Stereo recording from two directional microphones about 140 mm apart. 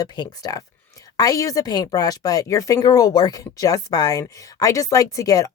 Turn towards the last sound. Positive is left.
turn(degrees=25)  # may be behind; listen again after turning